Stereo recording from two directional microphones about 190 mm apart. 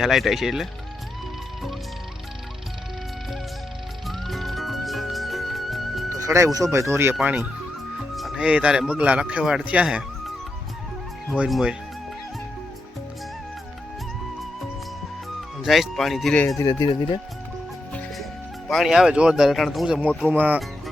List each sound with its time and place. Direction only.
0.0 s speech: centre (ahead or behind)
4.0 s music: centre (ahead or behind)
6.1 s speech: 15° right (ahead or behind)
15.4 s speech: centre (ahead or behind)
16.6 s speech: 20° left (ahead or behind)
18.7 s speech: centre (ahead or behind)